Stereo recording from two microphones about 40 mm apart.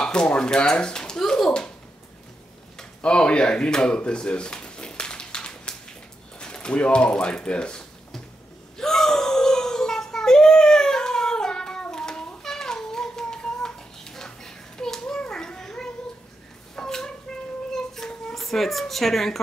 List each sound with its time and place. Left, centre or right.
0.0 s speech: left
3.0 s drawer open or close: left
6.4 s speech: left
8.7 s wail: centre
11.8 s a sound: centre